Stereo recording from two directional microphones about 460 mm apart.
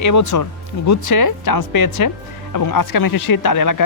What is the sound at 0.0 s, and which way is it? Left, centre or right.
Speech, left.